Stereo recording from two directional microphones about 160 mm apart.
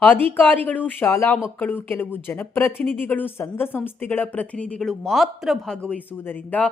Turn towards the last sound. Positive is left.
turn(degrees=10)  # may be behind; listen again after turning